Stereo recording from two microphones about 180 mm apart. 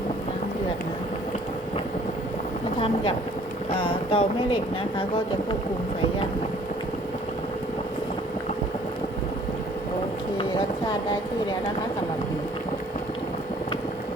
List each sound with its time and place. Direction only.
2.7 s speech: 30° left (ahead or behind)